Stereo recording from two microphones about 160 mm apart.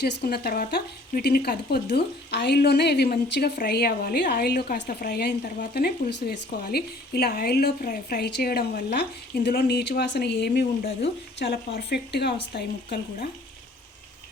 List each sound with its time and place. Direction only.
0.0 s speech: 80° left